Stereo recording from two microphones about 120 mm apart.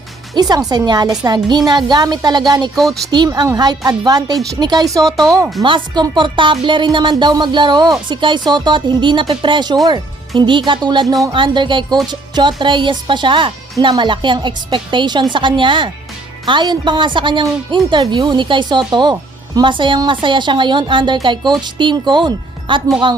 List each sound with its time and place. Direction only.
0.3 s speech: 35° right (ahead or behind)
2.7 s speech: centre (ahead or behind)
3.1 s speech: 35° right (ahead or behind)